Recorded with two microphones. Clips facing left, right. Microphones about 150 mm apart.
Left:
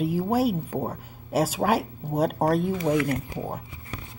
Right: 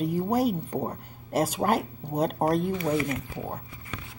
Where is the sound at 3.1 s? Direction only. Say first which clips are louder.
Left 4 dB; 35° left (ahead or behind).